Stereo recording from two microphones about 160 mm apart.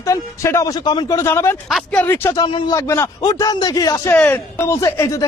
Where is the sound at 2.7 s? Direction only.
15° left (ahead or behind).